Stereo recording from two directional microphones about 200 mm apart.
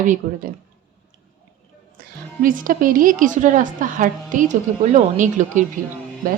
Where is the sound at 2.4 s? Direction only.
45° right (ahead or behind).